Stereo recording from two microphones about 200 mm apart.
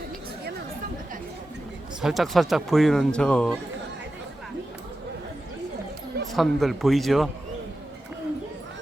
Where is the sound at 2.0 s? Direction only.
Centre (ahead or behind).